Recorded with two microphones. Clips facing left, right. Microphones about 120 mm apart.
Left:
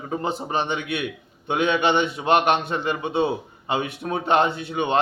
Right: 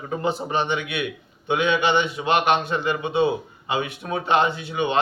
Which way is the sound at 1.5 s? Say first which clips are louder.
Even; 45° left (ahead or behind).